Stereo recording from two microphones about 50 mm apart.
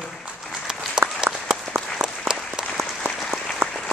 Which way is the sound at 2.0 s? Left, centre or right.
Centre.